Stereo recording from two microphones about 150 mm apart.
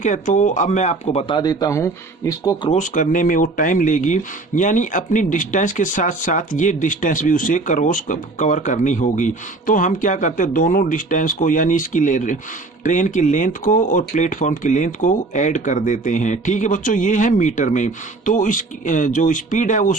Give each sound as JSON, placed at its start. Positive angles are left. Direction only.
{"t": 0.0, "sound": "speech", "side_deg": 55}
{"t": 1.4, "sound": "speech", "side_deg": 25}
{"t": 2.6, "sound": "speech", "side_deg": 55}